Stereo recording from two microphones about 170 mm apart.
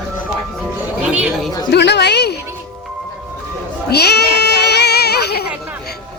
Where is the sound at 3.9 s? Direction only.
75° left (ahead or behind).